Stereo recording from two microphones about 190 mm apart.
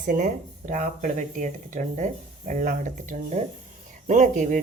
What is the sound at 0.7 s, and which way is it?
Speech, 40° right (ahead or behind).